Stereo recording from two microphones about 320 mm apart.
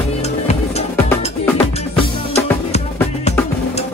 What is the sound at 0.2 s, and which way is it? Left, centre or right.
Music, centre.